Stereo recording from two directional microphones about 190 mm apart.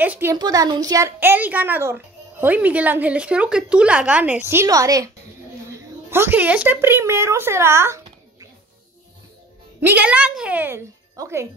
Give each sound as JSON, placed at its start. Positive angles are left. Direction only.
{"t": 0.0, "sound": "a woman's voice", "side_deg": -10}
{"t": 9.8, "sound": "speech", "side_deg": -10}